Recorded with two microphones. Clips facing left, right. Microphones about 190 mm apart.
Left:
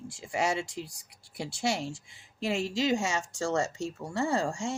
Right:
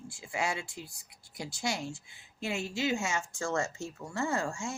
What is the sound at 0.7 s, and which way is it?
Speech, 90° left.